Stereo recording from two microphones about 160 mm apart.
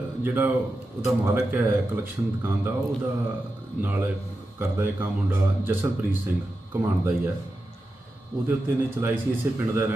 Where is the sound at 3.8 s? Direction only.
10° right (ahead or behind).